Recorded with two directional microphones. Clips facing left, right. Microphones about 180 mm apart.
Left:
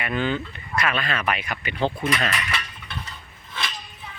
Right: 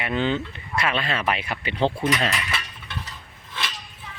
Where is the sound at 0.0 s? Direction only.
20° right (ahead or behind).